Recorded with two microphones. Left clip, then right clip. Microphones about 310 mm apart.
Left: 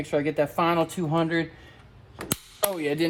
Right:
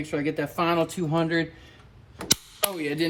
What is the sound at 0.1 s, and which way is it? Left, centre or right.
Speech, centre.